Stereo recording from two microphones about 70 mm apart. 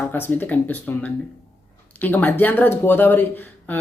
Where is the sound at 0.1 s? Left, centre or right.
Left.